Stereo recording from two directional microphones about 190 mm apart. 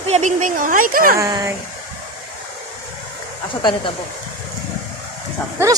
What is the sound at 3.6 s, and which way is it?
Speech, 25° left (ahead or behind).